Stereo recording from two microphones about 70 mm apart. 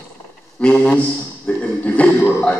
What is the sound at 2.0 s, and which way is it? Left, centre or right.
Speech, left.